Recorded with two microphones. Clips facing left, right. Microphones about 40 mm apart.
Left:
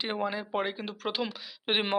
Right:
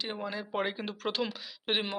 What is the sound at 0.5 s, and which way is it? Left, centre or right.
Speech, centre.